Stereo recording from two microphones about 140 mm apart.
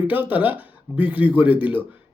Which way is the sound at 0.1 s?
10° right (ahead or behind).